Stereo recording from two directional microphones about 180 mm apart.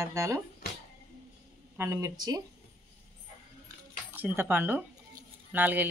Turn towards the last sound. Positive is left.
turn(degrees=-10)  # may be behind; listen again after turning